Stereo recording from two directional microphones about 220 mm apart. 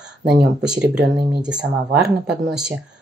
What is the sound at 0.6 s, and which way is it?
Speech, 5° right (ahead or behind).